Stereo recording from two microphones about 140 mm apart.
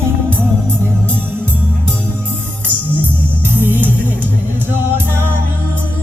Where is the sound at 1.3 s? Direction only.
15° right (ahead or behind).